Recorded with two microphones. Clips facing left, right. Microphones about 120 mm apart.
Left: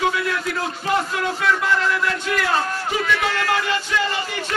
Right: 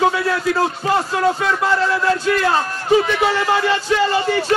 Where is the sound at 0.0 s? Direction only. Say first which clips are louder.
Right 5 dB; 30° right (ahead or behind).